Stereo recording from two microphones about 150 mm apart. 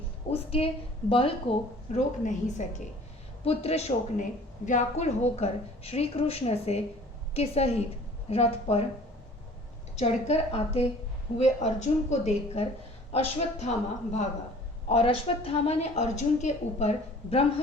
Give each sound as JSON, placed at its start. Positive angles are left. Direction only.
{"t": 0.3, "sound": "speech", "side_deg": 40}
{"t": 1.9, "sound": "speech", "side_deg": 55}
{"t": 3.4, "sound": "speech", "side_deg": 40}
{"t": 10.0, "sound": "speech", "side_deg": 50}